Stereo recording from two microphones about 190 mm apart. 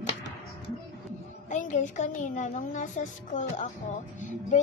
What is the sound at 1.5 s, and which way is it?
A woman's voice, 40° left (ahead or behind).